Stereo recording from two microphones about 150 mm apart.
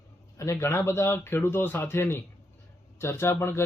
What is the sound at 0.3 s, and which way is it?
Speech, 20° left (ahead or behind).